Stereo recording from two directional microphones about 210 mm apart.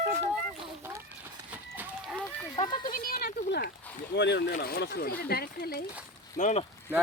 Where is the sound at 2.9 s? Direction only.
45° left (ahead or behind).